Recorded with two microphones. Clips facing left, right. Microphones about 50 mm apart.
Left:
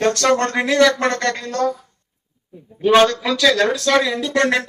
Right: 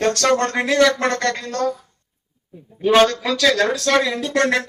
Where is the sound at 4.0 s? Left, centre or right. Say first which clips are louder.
Left 1 dB; centre.